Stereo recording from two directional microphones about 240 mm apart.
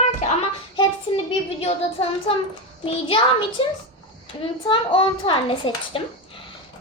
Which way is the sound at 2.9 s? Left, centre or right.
Left.